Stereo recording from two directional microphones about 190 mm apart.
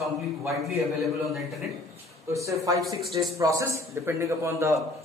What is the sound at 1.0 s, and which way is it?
Speech, centre (ahead or behind).